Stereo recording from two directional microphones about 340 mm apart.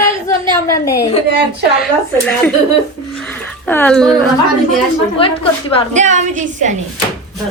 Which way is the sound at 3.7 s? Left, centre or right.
Centre.